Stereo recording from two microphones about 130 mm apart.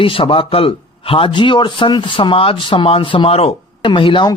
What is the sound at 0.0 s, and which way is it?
A man's voice, 45° left (ahead or behind).